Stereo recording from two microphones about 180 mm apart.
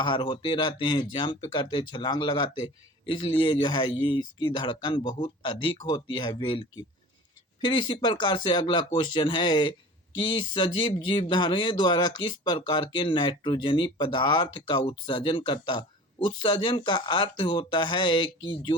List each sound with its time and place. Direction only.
0.0 s speech: 25° left (ahead or behind)